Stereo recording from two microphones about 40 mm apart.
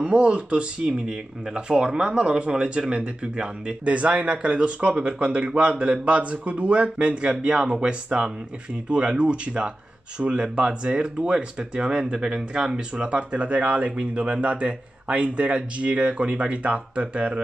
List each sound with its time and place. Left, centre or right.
0.0 s a man's voice: right